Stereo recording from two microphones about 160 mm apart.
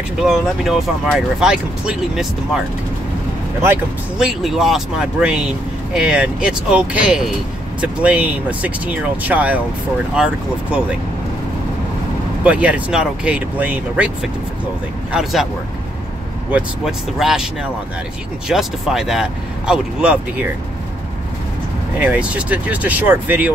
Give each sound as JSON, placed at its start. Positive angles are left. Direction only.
{"t": 0.2, "sound": "speech", "side_deg": -5}
{"t": 3.6, "sound": "speech", "side_deg": -10}
{"t": 12.4, "sound": "speech", "side_deg": -10}
{"t": 16.4, "sound": "speech", "side_deg": -5}
{"t": 18.5, "sound": "speech", "side_deg": -5}
{"t": 22.0, "sound": "speech", "side_deg": -10}